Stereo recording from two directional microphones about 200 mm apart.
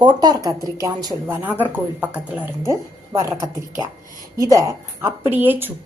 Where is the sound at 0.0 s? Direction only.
20° right (ahead or behind).